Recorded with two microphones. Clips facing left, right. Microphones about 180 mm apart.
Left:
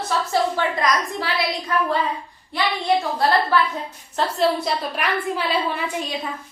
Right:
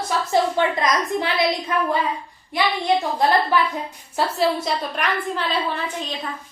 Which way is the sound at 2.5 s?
15° right (ahead or behind).